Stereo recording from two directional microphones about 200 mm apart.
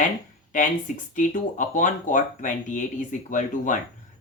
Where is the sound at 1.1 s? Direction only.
40° left (ahead or behind).